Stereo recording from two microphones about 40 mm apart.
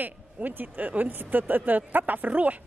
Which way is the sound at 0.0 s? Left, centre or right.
Right.